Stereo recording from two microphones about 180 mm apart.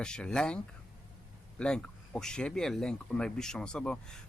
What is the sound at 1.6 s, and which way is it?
Speech, 5° left (ahead or behind).